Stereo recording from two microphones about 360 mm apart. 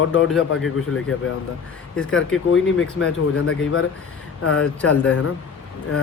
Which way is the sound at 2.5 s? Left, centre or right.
Left.